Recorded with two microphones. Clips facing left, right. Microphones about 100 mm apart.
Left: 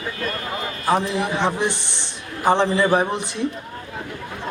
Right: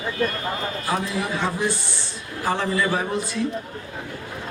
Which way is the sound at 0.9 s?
20° left (ahead or behind).